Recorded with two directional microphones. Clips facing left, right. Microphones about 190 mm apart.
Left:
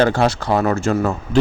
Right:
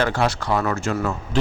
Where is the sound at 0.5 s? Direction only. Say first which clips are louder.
Left 5 dB; 40° left (ahead or behind).